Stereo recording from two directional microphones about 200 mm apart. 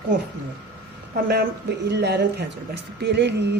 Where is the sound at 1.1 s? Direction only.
55° right (ahead or behind).